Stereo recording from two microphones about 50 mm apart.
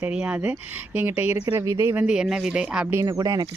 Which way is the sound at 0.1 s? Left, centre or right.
Right.